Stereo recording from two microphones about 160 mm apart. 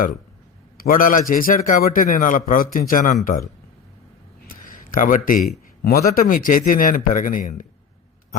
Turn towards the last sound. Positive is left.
turn(degrees=55)  # may be behind; listen again after turning